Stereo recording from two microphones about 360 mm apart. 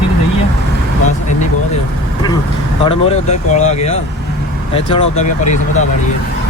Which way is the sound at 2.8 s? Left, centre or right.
Centre.